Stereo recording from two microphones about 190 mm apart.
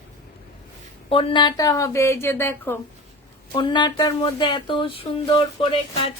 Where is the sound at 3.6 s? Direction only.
25° left (ahead or behind).